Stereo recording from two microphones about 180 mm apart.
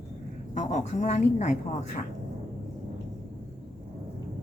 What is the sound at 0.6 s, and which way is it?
Speech, 45° left (ahead or behind).